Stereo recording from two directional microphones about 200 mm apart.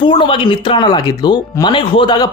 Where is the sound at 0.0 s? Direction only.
25° left (ahead or behind).